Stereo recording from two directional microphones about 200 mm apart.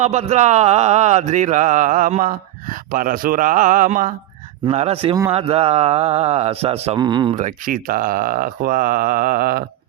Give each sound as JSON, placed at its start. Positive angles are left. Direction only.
{"t": 0.0, "sound": "speech", "side_deg": -35}
{"t": 7.3, "sound": "speech", "side_deg": -40}